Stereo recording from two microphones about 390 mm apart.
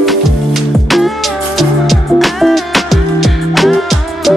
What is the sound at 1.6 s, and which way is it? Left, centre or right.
Music, centre.